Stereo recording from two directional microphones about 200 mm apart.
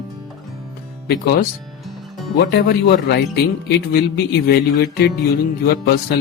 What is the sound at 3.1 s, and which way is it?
Speech, 60° left (ahead or behind).